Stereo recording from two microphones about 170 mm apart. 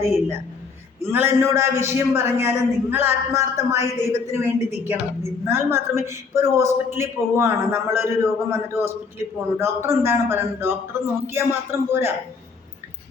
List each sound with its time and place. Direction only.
0.0 s a man's voice: 15° right (ahead or behind)